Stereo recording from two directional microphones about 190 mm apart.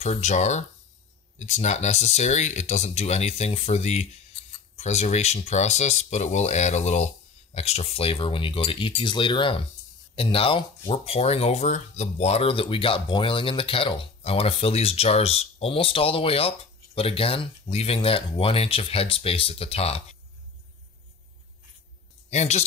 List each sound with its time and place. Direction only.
0.0 s speech: 35° left (ahead or behind)
22.3 s speech: 35° left (ahead or behind)